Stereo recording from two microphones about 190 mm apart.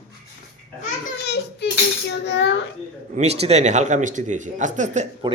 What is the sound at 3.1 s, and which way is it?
Speech, 35° right (ahead or behind).